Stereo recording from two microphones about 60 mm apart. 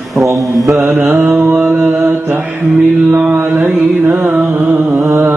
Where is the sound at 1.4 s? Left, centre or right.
Right.